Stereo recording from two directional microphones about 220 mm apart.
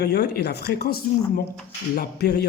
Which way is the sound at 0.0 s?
45° left (ahead or behind).